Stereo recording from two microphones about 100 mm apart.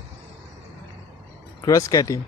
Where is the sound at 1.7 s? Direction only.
35° left (ahead or behind).